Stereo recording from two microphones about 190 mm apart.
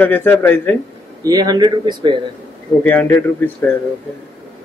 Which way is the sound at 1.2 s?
20° right (ahead or behind).